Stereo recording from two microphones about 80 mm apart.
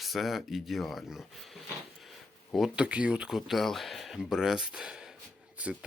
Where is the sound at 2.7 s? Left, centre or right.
Centre.